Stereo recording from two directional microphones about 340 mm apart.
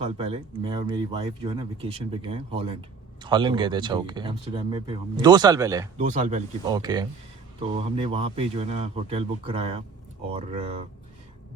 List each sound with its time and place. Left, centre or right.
0.0 s speech: centre
6.1 s speech: right